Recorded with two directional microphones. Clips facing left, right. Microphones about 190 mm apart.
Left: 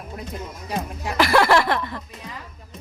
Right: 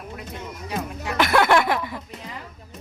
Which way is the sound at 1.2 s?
Centre (ahead or behind).